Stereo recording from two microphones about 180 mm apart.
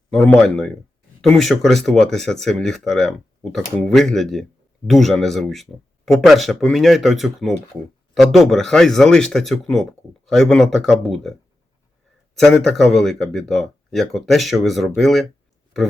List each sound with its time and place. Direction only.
0.1 s speech: 5° left (ahead or behind)